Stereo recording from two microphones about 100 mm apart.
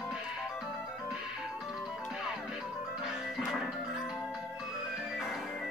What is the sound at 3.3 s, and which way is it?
Music, centre (ahead or behind).